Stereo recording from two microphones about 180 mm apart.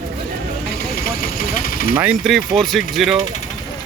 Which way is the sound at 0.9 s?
55° left (ahead or behind).